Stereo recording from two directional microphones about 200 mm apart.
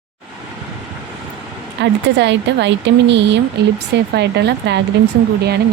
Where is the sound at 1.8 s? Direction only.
60° right (ahead or behind).